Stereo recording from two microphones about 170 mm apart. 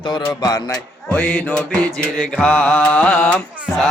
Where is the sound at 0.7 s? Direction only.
10° left (ahead or behind).